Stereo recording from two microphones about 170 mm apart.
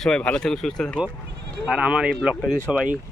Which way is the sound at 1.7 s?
5° right (ahead or behind).